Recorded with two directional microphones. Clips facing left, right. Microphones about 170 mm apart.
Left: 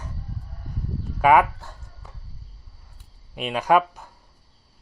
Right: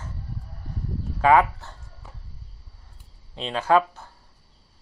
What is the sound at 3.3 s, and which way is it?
Speech, 15° left (ahead or behind).